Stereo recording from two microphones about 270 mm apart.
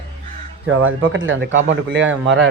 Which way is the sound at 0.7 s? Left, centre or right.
Right.